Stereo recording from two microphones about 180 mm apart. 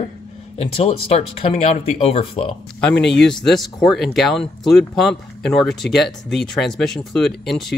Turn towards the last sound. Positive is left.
turn(degrees=0)  # may be behind; listen again after turning